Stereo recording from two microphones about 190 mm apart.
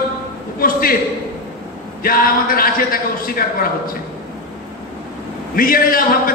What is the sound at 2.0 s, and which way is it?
A man's voice, 50° left (ahead or behind).